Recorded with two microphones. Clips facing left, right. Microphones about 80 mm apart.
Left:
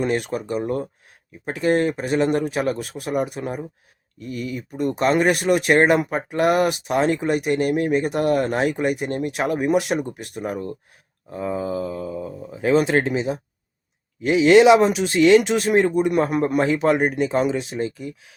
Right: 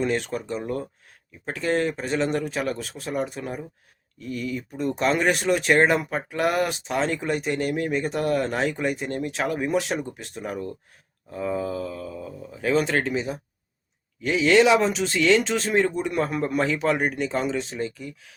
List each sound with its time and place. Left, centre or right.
0.0 s speech: centre
1.5 s speech: centre
4.3 s speech: centre